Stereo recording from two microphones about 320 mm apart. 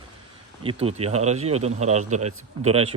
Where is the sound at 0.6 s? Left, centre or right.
Centre.